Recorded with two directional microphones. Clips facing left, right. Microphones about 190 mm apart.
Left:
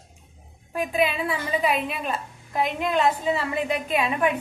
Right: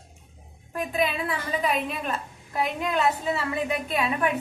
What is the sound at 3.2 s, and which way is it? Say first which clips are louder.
Speech: left 2 dB; 15° left (ahead or behind).